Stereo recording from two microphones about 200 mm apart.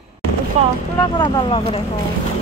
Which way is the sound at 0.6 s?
30° right (ahead or behind).